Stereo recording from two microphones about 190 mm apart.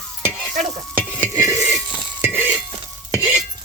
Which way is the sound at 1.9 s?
25° right (ahead or behind).